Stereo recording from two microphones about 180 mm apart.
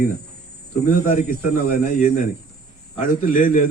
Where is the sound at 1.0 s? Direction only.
45° left (ahead or behind).